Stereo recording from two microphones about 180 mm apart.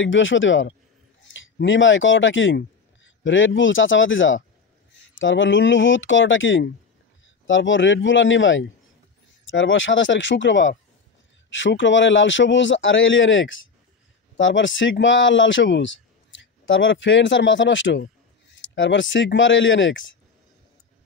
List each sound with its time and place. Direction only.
0.0 s a man's voice: 90° left